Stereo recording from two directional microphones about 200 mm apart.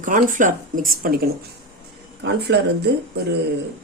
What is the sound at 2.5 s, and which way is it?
Speech, 60° right (ahead or behind).